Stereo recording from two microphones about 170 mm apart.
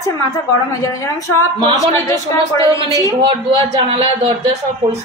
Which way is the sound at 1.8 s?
20° left (ahead or behind).